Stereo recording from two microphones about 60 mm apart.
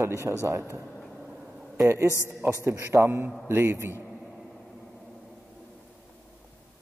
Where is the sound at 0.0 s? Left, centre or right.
Right.